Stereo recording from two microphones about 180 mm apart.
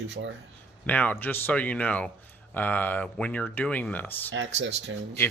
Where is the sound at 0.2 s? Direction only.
80° right.